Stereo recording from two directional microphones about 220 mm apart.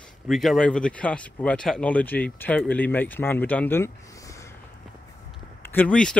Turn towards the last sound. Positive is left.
turn(degrees=5)  # may be behind; listen again after turning